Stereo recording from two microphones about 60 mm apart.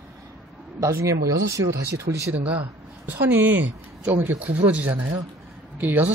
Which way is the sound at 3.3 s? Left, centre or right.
Right.